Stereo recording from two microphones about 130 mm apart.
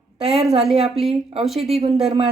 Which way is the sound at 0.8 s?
Centre (ahead or behind).